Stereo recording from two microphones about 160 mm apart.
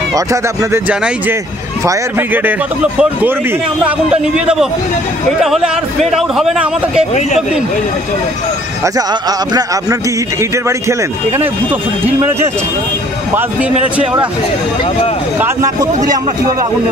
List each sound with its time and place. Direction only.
0.1 s speech: 20° right (ahead or behind)
0.8 s a man's voice: 10° right (ahead or behind)
9.5 s speech: 25° right (ahead or behind)
15.3 s speech: 15° right (ahead or behind)